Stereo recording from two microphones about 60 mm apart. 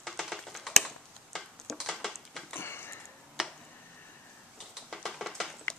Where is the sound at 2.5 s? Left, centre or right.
Left.